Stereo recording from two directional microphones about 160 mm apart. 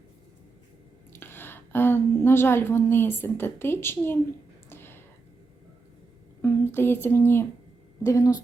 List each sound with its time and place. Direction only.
1.1 s a woman's voice: 15° left (ahead or behind)
4.7 s a sound: 15° left (ahead or behind)
6.4 s speech: 15° left (ahead or behind)